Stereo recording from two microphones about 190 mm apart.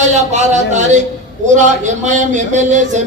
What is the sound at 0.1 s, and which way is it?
Speech, 35° right (ahead or behind).